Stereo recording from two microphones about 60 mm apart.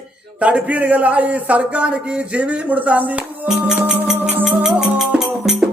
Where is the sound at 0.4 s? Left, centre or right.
Right.